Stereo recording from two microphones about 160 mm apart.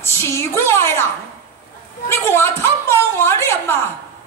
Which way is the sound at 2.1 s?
15° left (ahead or behind).